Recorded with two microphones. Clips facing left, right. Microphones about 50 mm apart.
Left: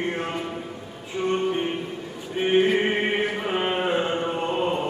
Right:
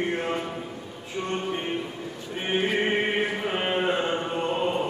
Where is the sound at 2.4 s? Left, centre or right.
Centre.